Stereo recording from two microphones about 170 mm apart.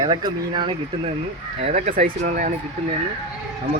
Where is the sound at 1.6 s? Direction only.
45° right (ahead or behind).